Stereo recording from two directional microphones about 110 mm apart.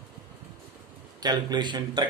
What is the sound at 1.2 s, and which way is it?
Speech, 40° right (ahead or behind).